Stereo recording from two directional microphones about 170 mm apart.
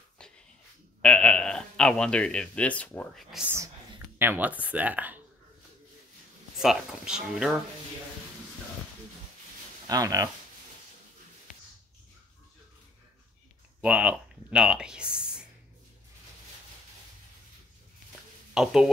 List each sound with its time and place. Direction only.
0.2 s a sound: 5° left (ahead or behind)
1.0 s speech: 5° left (ahead or behind)
3.4 s speech: 15° right (ahead or behind)
6.6 s speech: centre (ahead or behind)
9.8 s speech: 20° right (ahead or behind)
13.7 s speech: 5° right (ahead or behind)
18.5 s speech: 5° right (ahead or behind)